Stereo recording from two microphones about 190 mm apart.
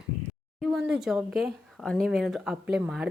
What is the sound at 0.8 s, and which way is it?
A woman's voice, 5° right (ahead or behind).